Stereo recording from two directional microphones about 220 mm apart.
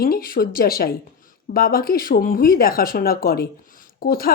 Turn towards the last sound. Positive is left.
turn(degrees=40)  # may be behind; listen again after turning